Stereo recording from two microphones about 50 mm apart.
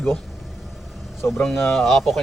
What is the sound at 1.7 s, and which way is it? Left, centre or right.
Speech, centre.